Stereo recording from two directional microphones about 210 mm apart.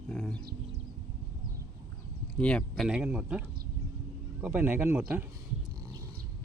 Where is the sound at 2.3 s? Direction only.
5° left (ahead or behind); by 5.0 s 10° right (ahead or behind).